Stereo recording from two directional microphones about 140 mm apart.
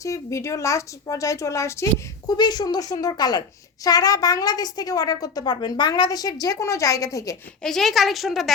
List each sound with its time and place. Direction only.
0.0 s a woman's voice: 20° left (ahead or behind)
7.6 s a woman's voice: centre (ahead or behind)